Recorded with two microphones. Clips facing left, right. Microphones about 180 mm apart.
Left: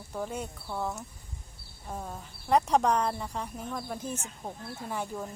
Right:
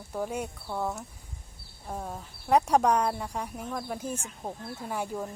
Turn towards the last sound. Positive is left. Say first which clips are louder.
# right 2 dB
turn(degrees=-10)  # may be behind; listen again after turning